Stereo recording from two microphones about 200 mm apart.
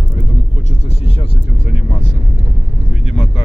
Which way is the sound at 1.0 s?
30° left (ahead or behind).